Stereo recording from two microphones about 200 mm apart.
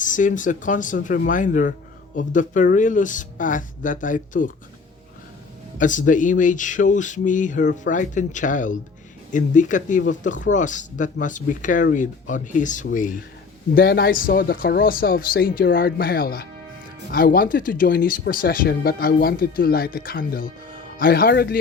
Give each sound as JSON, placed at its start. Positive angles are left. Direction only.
{"t": 0.0, "sound": "speech", "side_deg": 40}
{"t": 5.8, "sound": "speech", "side_deg": 40}